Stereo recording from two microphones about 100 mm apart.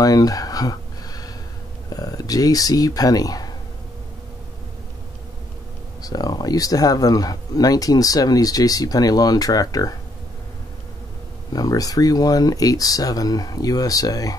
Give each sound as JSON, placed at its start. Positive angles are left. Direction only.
{"t": 0.0, "sound": "a sound", "side_deg": 40}
{"t": 1.9, "sound": "speech", "side_deg": 40}
{"t": 6.0, "sound": "speech", "side_deg": 40}
{"t": 11.5, "sound": "speech", "side_deg": 40}